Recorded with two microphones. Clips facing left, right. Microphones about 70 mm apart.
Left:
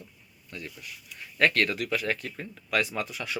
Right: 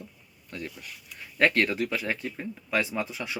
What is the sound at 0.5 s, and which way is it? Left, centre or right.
Speech, right.